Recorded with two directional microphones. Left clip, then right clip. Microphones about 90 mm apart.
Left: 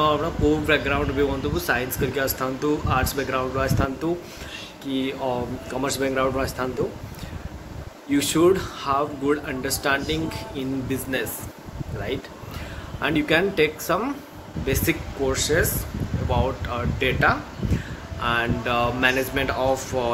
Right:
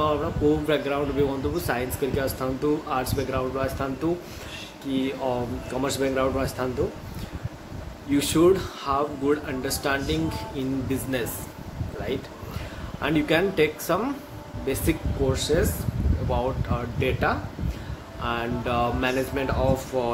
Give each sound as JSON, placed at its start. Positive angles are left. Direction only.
{"t": 0.7, "sound": "speech", "side_deg": -25}
{"t": 8.1, "sound": "speech", "side_deg": -15}
{"t": 13.0, "sound": "speech", "side_deg": -20}